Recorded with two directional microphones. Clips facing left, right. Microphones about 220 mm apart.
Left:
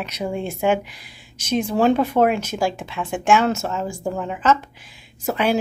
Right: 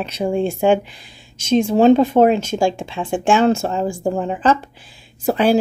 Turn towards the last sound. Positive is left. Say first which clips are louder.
# right 5 dB
turn(degrees=-35)  # may be behind; listen again after turning